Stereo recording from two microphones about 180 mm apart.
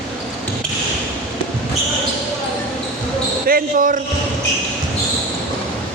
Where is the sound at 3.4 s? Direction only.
50° right (ahead or behind).